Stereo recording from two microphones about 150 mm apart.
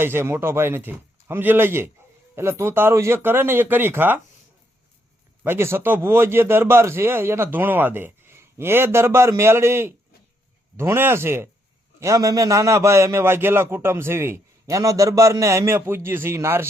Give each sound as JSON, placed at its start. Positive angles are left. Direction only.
{"t": 0.0, "sound": "a man's voice", "side_deg": -15}
{"t": 5.4, "sound": "a man's voice", "side_deg": -15}